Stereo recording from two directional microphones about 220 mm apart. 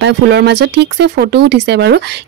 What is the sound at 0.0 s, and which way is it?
Speech, 50° right (ahead or behind).